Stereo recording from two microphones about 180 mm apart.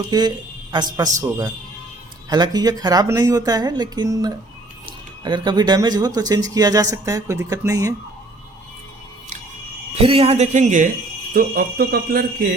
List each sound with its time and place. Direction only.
0.1 s a man's voice: 25° right (ahead or behind)
9.9 s speech: 35° right (ahead or behind)
11.3 s speech: 55° right (ahead or behind)